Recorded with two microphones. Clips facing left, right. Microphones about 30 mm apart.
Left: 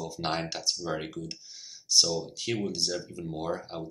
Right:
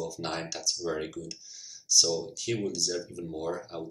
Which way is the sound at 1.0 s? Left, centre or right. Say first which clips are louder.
Left 1 dB; left.